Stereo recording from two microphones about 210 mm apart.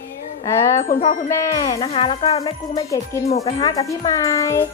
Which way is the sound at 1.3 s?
15° left (ahead or behind).